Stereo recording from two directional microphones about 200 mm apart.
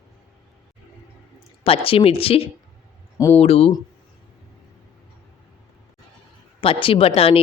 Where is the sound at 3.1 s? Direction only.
15° left (ahead or behind).